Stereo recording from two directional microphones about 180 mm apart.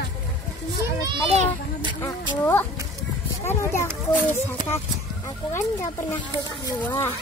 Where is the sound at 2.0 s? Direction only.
10° left (ahead or behind).